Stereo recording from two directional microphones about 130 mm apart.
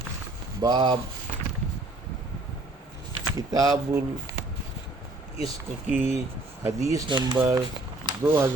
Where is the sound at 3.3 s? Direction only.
30° right (ahead or behind).